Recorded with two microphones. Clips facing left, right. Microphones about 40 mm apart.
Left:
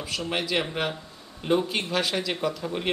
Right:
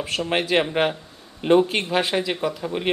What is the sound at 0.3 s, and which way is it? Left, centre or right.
Speech, right.